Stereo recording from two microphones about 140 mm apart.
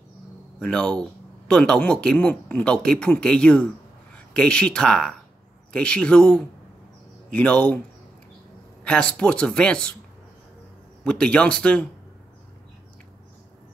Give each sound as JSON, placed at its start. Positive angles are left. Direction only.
{"t": 0.6, "sound": "speech", "side_deg": 5}
{"t": 8.8, "sound": "speech", "side_deg": 5}
{"t": 11.1, "sound": "speech", "side_deg": 10}